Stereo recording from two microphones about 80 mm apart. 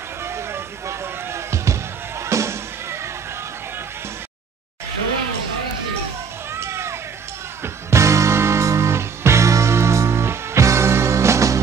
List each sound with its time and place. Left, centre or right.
0.2 s music: right
6.5 s a sound: right
7.6 s music: right